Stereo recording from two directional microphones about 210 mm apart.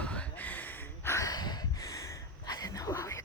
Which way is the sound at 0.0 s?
5° left (ahead or behind).